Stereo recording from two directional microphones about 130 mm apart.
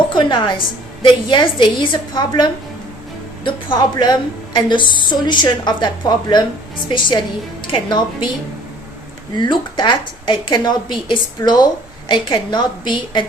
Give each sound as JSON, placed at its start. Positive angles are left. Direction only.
{"t": 0.1, "sound": "music", "side_deg": 35}
{"t": 1.0, "sound": "a woman's voice", "side_deg": 40}
{"t": 9.3, "sound": "a woman's voice", "side_deg": 35}